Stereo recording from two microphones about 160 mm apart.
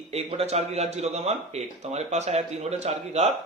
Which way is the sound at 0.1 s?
40° right (ahead or behind).